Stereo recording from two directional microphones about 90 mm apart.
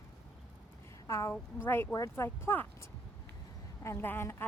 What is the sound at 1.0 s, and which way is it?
Speech, 35° left (ahead or behind).